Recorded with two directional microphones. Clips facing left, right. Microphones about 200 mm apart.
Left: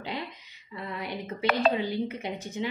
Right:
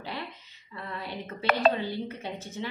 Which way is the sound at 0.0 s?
15° left (ahead or behind).